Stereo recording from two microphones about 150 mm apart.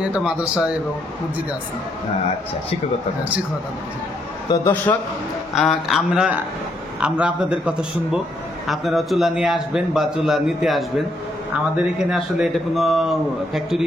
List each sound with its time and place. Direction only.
0.1 s a man's voice: 5° right (ahead or behind)
4.5 s a man's voice: 25° left (ahead or behind)
4.9 s a man's voice: 15° left (ahead or behind)
5.5 s a man's voice: centre (ahead or behind)